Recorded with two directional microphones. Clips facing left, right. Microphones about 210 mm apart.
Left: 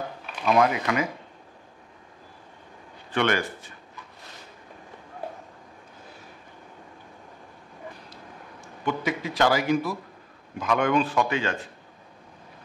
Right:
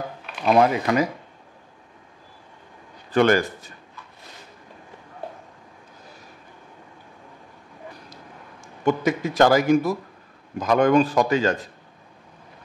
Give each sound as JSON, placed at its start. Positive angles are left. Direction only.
{"t": 0.5, "sound": "a man's voice", "side_deg": -35}
{"t": 3.1, "sound": "speech", "side_deg": -40}
{"t": 8.1, "sound": "a sound", "side_deg": -45}
{"t": 10.6, "sound": "a man's voice", "side_deg": -40}